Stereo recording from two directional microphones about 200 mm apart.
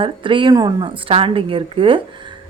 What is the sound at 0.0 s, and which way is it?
A woman's voice, 25° right (ahead or behind).